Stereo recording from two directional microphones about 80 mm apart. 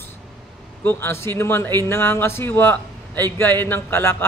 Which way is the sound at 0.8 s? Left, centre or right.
Left.